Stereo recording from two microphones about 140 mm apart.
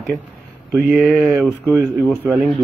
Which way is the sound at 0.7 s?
5° right (ahead or behind).